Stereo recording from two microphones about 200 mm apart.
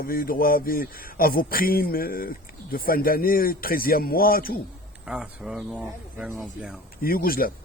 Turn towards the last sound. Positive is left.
turn(degrees=45)  # may be behind; listen again after turning